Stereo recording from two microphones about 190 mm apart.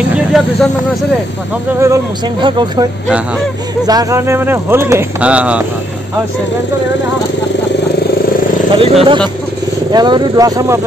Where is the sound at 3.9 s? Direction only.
20° right (ahead or behind).